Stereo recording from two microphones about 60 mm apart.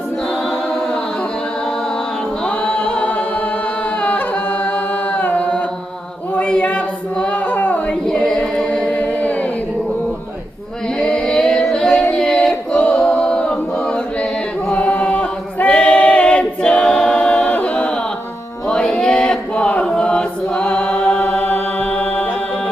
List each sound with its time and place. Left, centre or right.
2.6 s a capella: left
4.0 s music: left
5.1 s chant: left
6.3 s a sound: left
8.0 s a capella: centre
9.0 s singing: left
11.0 s singing: centre
12.1 s a capella: centre
18.7 s chant: centre
21.2 s music: left